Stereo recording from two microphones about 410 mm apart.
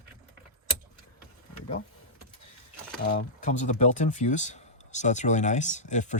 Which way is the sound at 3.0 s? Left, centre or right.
Left.